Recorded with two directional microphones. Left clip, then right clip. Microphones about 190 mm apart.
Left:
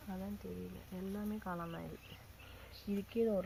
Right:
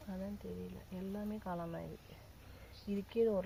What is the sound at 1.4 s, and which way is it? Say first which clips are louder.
Speech: right 1 dB; 35° right (ahead or behind).